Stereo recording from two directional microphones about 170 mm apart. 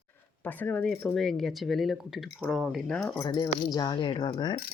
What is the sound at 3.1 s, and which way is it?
Speech, 25° left (ahead or behind).